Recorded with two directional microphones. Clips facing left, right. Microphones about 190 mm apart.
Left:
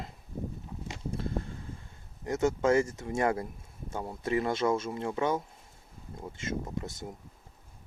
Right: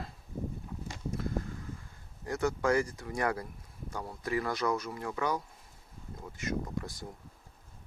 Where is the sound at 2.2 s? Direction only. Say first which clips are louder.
Left 3 dB; 20° left (ahead or behind).